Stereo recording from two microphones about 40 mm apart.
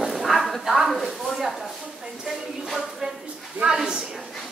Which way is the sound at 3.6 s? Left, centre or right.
Centre.